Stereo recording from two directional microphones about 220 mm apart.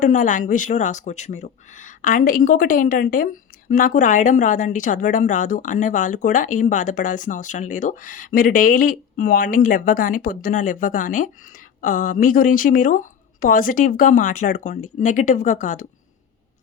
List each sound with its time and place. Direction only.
0.0 s speech: 35° left (ahead or behind)